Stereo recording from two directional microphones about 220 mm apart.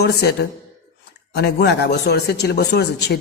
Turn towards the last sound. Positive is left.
turn(degrees=50)  # may be behind; listen again after turning